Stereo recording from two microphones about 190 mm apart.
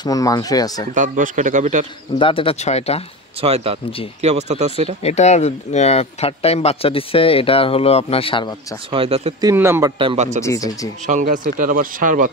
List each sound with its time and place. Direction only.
0.0 s speech: 20° left (ahead or behind)
0.9 s speech: 45° right (ahead or behind)
2.1 s speech: 30° left (ahead or behind)
3.3 s speech: 30° right (ahead or behind)
5.0 s speech: 35° left (ahead or behind)
8.9 s speech: 30° right (ahead or behind)
9.4 s a man's voice: 15° right (ahead or behind)
9.9 s speech: 30° right (ahead or behind)
10.4 s speech: 15° left (ahead or behind)
11.1 s speech: 45° right (ahead or behind)